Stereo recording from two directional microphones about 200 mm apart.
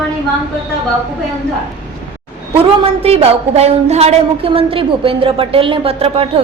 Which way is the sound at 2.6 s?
30° right (ahead or behind).